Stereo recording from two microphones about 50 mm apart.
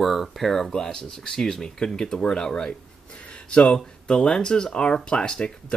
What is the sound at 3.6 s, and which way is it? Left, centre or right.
Speech, centre.